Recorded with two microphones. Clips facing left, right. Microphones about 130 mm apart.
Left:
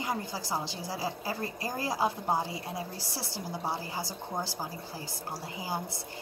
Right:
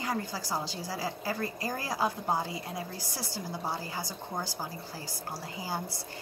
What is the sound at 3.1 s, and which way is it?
A woman's voice, 25° left (ahead or behind).